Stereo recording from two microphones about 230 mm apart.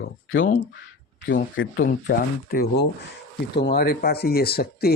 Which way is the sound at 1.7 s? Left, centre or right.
Left.